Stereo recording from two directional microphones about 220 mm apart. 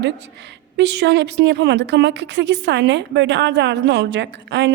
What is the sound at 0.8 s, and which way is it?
A woman's voice, 50° right (ahead or behind).